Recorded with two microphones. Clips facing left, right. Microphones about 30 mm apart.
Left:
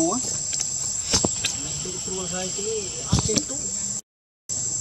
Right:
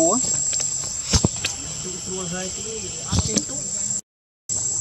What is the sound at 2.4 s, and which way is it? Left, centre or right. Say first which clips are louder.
Speech: left 1 dB; left.